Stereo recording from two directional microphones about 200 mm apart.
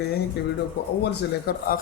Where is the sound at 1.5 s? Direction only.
50° left (ahead or behind).